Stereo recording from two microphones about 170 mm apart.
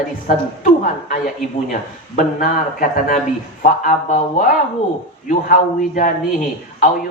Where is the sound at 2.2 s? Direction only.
50° left (ahead or behind).